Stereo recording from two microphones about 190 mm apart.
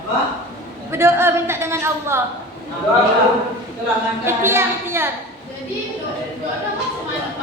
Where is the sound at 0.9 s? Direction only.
15° right (ahead or behind).